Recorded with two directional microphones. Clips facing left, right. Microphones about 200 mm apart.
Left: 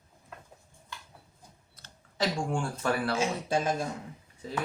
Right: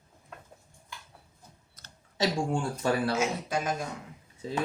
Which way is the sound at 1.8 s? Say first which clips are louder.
Left 1 dB; 45° right (ahead or behind).